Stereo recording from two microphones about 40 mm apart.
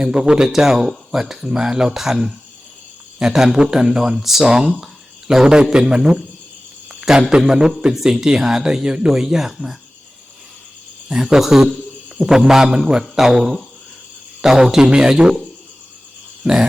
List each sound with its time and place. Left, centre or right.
0.0 s speech: centre
4.4 s a man's voice: centre
7.2 s a man's voice: right
7.4 s speech: centre
11.1 s a man's voice: centre
11.3 s speech: centre
14.8 s a man's voice: right
16.4 s speech: centre